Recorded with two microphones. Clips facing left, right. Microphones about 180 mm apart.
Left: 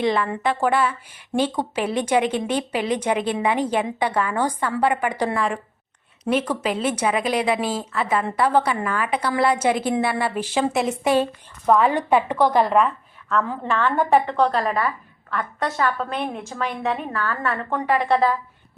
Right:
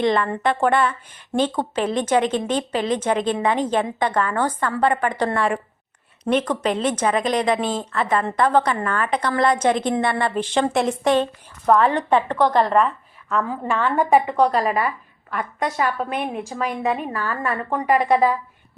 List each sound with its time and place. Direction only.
0.0 s speech: 5° left (ahead or behind)
13.2 s a woman's voice: 5° right (ahead or behind)